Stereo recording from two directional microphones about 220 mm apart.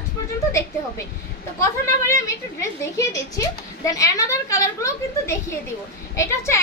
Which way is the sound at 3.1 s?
15° left (ahead or behind).